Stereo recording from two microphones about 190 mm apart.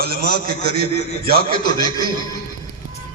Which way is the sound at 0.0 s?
55° right (ahead or behind).